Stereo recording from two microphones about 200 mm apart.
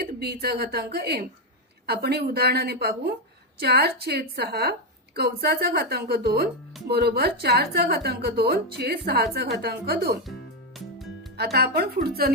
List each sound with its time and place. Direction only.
0.0 s a sound: 55° right (ahead or behind)
0.4 s a woman's voice: 50° right (ahead or behind)
10.8 s music: centre (ahead or behind)
11.3 s a woman's voice: 55° right (ahead or behind)